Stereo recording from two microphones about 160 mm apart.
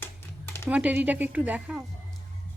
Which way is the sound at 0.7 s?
10° right (ahead or behind).